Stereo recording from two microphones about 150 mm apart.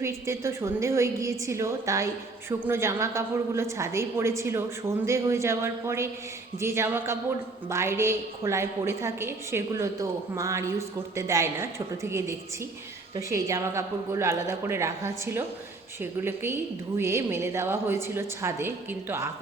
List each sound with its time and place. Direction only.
0.0 s a woman's voice: 20° right (ahead or behind)